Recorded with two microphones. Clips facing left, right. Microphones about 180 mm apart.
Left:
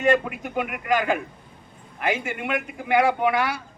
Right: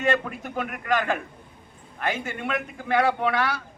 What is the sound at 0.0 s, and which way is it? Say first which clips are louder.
A man's voice: left 4 dB; 15° left (ahead or behind).